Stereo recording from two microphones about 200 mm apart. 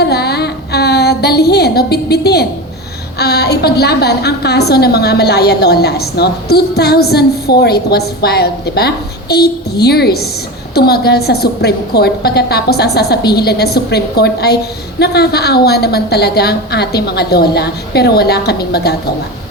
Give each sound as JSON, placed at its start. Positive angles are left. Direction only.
{"t": 0.0, "sound": "child singing", "side_deg": 55}
{"t": 3.2, "sound": "a woman's voice", "side_deg": 55}